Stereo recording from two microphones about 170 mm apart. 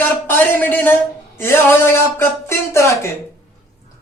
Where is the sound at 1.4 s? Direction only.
15° left (ahead or behind).